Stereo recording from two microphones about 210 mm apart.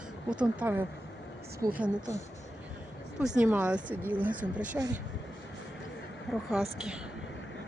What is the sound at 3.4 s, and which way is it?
Speech, 5° right (ahead or behind).